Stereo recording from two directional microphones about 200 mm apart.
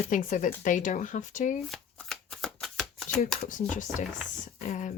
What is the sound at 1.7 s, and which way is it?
Shuffling cards, centre (ahead or behind).